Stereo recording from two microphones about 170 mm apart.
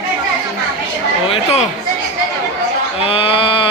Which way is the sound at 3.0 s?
35° left (ahead or behind).